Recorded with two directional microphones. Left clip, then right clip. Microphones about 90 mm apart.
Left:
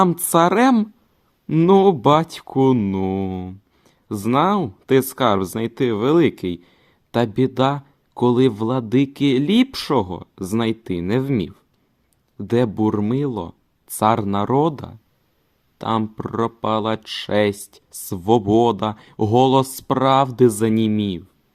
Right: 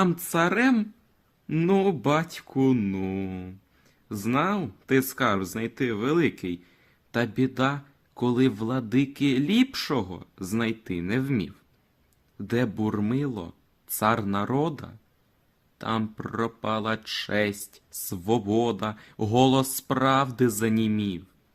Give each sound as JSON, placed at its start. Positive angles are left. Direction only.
{"t": 0.2, "sound": "speech", "side_deg": 90}
{"t": 1.5, "sound": "speech", "side_deg": 70}
{"t": 2.7, "sound": "speech", "side_deg": 55}
{"t": 12.4, "sound": "speech", "side_deg": 45}